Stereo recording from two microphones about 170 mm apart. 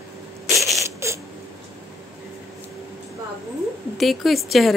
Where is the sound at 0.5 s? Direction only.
Centre (ahead or behind).